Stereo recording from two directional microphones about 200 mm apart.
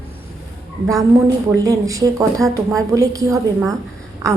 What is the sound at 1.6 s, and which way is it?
A woman's voice, 15° right (ahead or behind).